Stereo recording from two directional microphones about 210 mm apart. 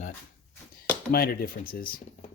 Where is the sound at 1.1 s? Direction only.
45° left (ahead or behind).